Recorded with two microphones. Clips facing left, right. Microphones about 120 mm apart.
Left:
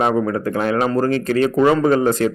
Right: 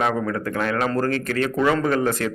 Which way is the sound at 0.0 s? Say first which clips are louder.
Left 5 dB; 25° left (ahead or behind).